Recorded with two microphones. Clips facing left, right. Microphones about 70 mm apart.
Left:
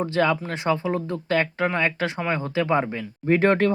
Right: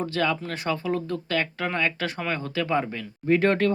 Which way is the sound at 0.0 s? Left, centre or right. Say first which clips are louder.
Left 4 dB; left.